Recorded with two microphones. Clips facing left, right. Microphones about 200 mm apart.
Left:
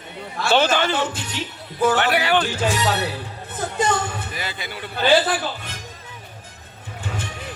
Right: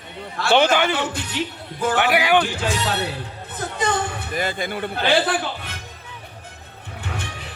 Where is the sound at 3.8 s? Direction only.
55° right (ahead or behind).